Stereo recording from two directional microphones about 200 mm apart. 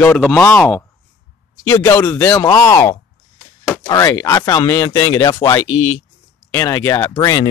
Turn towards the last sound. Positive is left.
turn(degrees=25)  # may be behind; listen again after turning